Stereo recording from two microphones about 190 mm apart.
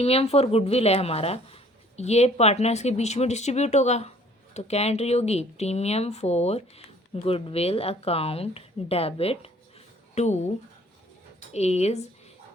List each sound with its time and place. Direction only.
0.0 s speech: 30° left (ahead or behind)